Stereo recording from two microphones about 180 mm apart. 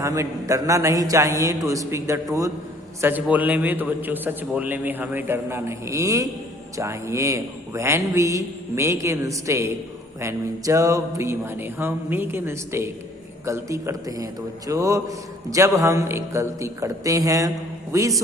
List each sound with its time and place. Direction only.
0.0 s a man's voice: 15° right (ahead or behind)